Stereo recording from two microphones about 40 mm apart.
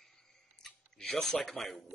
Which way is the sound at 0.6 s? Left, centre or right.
Centre.